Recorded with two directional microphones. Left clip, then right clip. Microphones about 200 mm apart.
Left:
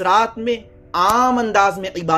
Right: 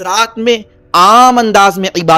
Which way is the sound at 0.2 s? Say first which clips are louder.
Right 7 dB; 55° right (ahead or behind).